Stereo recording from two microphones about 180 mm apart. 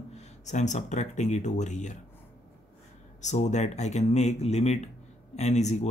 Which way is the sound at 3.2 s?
40° left (ahead or behind).